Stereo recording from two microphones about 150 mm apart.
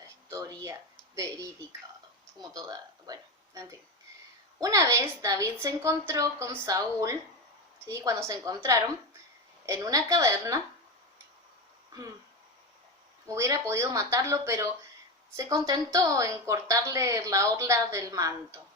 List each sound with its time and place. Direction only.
0.3 s speech: 20° right (ahead or behind)
13.2 s speech: 20° right (ahead or behind)